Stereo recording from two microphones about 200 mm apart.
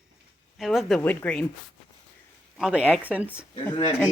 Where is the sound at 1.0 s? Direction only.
10° left (ahead or behind).